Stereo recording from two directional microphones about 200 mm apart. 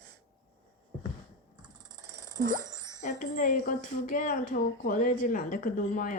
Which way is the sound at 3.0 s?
40° left (ahead or behind).